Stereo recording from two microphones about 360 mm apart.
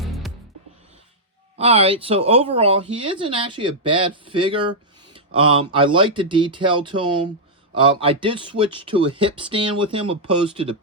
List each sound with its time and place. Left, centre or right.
0.0 s music: centre
1.5 s speech: centre
5.1 s a sound: centre
5.7 s speech: centre